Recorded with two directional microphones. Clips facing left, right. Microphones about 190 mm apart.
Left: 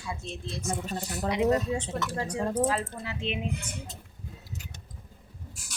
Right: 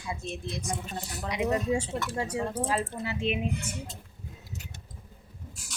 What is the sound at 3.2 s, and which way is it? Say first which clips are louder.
Speech: right 2 dB; 5° right (ahead or behind).